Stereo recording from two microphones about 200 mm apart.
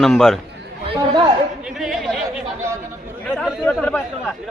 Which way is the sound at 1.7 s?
Centre (ahead or behind).